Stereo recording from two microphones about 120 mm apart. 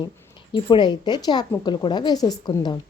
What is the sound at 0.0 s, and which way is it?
A woman's voice, 40° left (ahead or behind).